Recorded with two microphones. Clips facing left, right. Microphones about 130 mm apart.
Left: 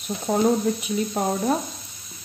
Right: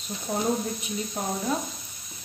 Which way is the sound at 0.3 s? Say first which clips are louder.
Left 7 dB; 75° left (ahead or behind).